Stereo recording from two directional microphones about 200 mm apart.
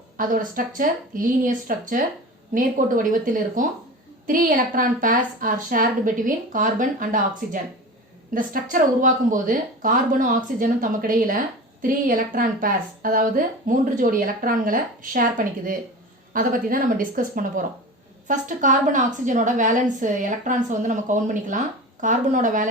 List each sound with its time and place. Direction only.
0.2 s a woman's voice: 45° right (ahead or behind)